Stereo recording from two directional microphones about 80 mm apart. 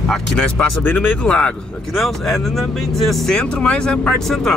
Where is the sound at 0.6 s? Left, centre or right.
Centre.